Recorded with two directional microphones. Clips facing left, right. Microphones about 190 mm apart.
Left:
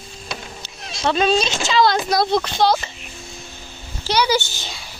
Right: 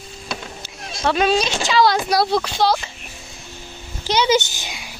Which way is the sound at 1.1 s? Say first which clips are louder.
Even; 10° right (ahead or behind).